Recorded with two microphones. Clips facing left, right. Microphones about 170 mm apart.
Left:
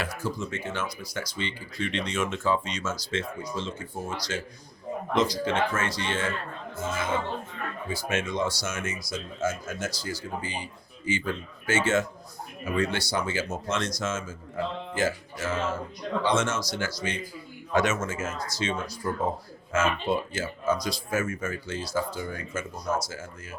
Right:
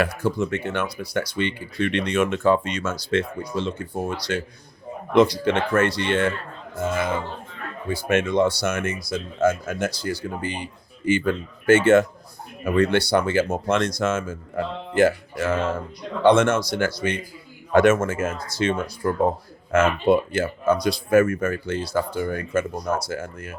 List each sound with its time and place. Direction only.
0.0 s speech: 60° right (ahead or behind)